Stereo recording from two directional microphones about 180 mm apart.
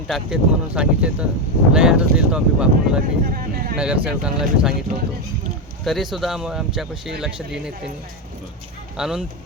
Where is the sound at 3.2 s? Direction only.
50° right (ahead or behind).